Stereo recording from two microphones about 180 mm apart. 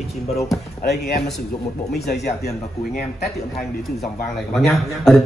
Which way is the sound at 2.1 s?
60° left (ahead or behind).